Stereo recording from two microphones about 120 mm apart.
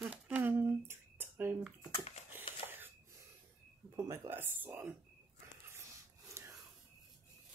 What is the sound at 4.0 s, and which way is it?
Speech, 20° right (ahead or behind).